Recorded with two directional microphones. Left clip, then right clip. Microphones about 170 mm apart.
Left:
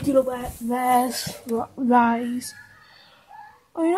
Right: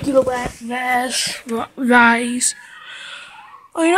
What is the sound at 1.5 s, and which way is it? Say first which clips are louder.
Speech: right 3 dB; 25° right (ahead or behind).